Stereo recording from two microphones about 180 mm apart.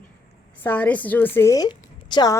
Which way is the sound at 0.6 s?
10° left (ahead or behind).